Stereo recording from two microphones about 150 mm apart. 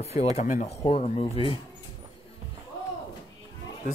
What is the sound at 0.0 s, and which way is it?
Speech, 45° left (ahead or behind).